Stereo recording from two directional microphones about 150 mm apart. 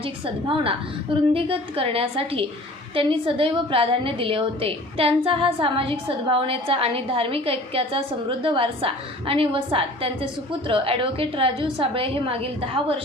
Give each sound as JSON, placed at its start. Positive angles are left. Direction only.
{"t": 0.0, "sound": "a woman's voice", "side_deg": -35}